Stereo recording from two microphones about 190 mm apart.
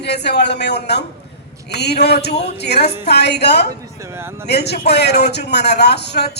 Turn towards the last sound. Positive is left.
turn(degrees=60)  # may be behind; listen again after turning